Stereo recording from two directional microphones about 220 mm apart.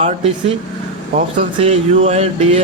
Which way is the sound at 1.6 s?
30° right (ahead or behind).